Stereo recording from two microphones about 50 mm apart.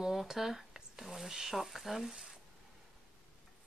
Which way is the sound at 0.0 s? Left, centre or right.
Centre.